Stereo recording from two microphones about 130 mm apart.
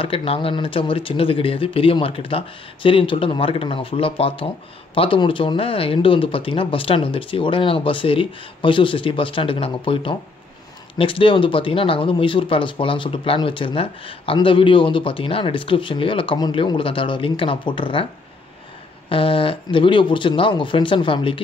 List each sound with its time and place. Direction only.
0.0 s speech: 45° left (ahead or behind)
19.0 s speech: 45° left (ahead or behind)